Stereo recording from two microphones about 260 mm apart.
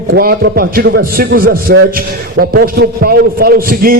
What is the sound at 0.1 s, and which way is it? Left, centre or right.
A man's voice, right.